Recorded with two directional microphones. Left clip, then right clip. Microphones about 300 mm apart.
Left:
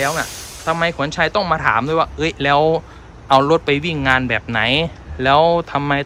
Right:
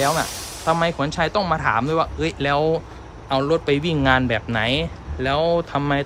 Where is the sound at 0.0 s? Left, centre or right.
Centre.